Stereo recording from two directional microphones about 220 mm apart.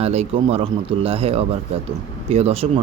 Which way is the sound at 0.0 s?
30° right (ahead or behind).